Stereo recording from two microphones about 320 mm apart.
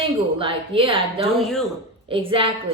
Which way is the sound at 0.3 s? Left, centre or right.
Centre.